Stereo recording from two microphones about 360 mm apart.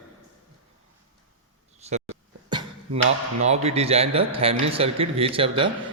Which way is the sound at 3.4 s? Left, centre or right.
Centre.